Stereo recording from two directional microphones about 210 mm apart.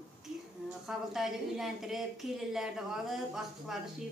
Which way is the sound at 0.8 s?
Centre (ahead or behind).